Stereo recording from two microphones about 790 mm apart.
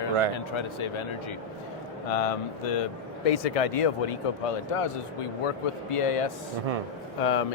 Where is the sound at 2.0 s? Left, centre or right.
Left.